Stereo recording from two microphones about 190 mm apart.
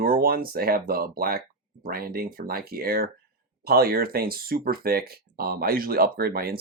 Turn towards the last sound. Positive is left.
turn(degrees=-55)  # may be behind; listen again after turning